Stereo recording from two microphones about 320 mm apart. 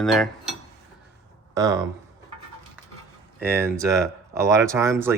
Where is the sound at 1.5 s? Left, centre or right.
Centre.